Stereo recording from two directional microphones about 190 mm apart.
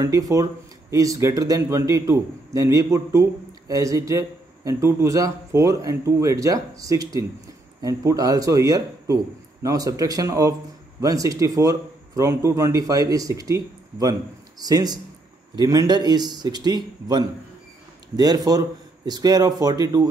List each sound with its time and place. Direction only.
0.0 s a man's voice: 15° right (ahead or behind)